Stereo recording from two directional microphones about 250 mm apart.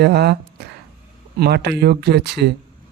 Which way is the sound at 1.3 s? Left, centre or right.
Right.